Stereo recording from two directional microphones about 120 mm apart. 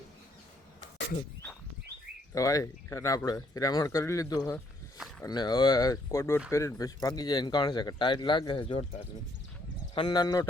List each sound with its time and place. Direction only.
2.3 s speech: 30° left (ahead or behind); by 8.9 s 45° left (ahead or behind)
9.9 s speech: 40° left (ahead or behind)